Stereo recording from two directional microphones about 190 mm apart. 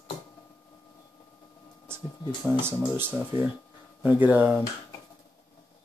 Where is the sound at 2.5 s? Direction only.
10° right (ahead or behind).